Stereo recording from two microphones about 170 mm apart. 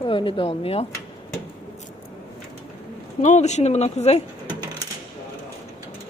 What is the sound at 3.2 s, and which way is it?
Speech, 45° left (ahead or behind).